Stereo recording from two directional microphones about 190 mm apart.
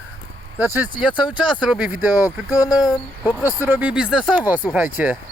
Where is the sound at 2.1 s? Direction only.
15° left (ahead or behind).